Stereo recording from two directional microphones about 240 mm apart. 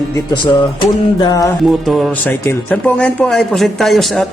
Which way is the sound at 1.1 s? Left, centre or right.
Centre.